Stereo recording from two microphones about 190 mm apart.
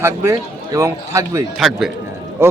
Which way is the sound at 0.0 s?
15° right (ahead or behind).